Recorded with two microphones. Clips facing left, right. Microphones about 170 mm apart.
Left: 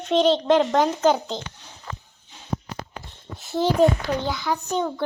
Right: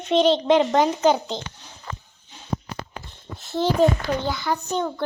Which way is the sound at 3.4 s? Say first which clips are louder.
Left 1 dB; centre (ahead or behind).